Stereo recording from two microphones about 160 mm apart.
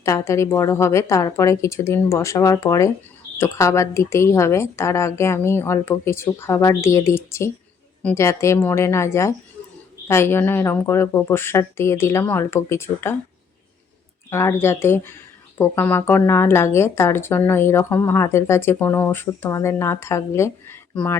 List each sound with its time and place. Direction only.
0.0 s a woman's voice: 20° left (ahead or behind)
14.3 s speech: 15° left (ahead or behind)